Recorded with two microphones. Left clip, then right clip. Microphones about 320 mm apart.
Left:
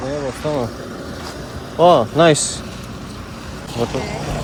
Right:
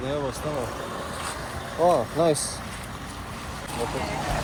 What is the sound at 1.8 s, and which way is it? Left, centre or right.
Speech, left.